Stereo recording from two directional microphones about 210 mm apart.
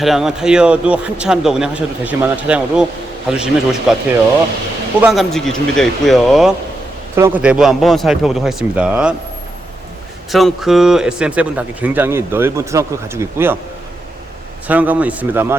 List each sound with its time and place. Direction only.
0.0 s speech: centre (ahead or behind)
4.9 s speech: 5° right (ahead or behind)
10.3 s speech: centre (ahead or behind)
14.7 s speech: 5° right (ahead or behind)